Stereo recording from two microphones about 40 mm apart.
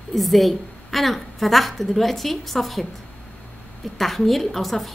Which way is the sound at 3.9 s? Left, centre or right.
Centre.